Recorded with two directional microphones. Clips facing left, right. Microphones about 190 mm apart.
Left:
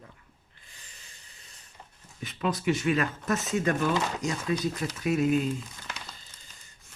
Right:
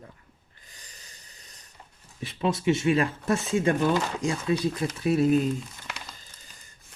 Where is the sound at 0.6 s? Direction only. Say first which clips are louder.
Right 3 dB; 40° right (ahead or behind).